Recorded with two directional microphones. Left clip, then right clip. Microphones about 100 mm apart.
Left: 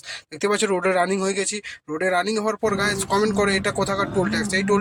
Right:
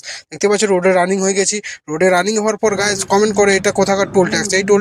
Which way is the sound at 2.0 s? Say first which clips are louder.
Right 8 dB; 40° right (ahead or behind).